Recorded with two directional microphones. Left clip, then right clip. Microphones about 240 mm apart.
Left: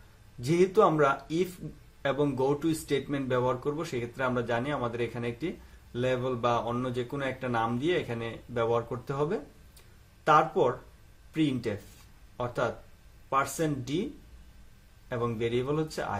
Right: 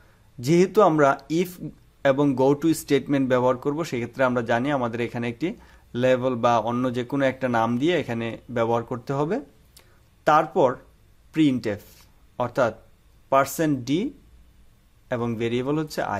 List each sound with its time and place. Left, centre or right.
0.4 s speech: right
15.0 s speech: right